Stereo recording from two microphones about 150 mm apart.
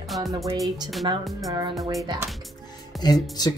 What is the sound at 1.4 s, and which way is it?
Speech, 25° right (ahead or behind).